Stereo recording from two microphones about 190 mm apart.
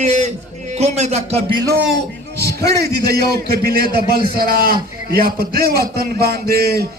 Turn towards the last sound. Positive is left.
turn(degrees=-55)  # may be behind; listen again after turning